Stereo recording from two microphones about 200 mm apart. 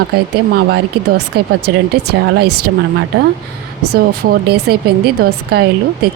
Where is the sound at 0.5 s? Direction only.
55° right (ahead or behind).